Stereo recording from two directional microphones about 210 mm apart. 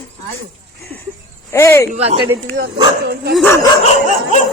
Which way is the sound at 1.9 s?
30° right (ahead or behind).